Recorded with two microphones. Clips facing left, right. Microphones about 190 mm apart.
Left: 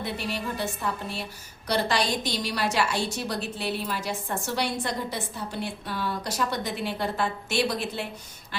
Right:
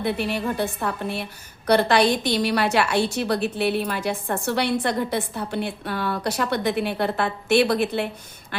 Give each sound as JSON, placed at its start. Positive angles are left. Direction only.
{"t": 0.0, "sound": "a woman's voice", "side_deg": -60}